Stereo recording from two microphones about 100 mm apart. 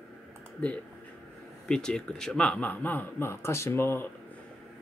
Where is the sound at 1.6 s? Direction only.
5° left (ahead or behind); by 4.0 s 25° left (ahead or behind).